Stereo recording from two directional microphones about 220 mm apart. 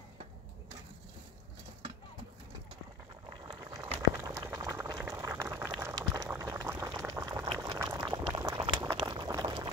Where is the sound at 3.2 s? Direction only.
20° right (ahead or behind).